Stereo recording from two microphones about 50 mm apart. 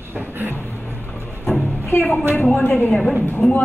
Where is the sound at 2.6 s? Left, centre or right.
Left.